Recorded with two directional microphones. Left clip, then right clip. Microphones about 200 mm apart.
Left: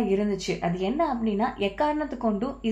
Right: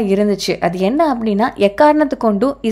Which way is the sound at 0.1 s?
50° right (ahead or behind).